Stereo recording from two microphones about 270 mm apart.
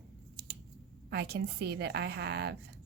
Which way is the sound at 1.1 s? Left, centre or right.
Right.